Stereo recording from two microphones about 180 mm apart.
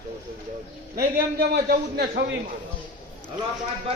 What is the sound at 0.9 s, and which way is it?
A man's voice, 60° right (ahead or behind).